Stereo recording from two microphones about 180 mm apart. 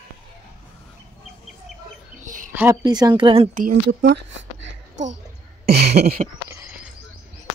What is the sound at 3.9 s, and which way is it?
Speech, 90° right.